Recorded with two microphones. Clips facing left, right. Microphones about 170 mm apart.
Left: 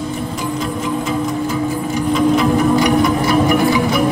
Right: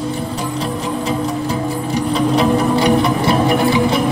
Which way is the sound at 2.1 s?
30° right (ahead or behind).